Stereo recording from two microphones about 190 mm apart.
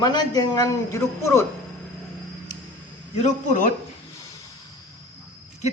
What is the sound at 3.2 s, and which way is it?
Speech, 40° left (ahead or behind).